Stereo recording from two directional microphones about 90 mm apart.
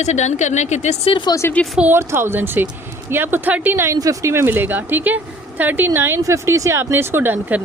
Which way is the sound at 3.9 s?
40° right (ahead or behind).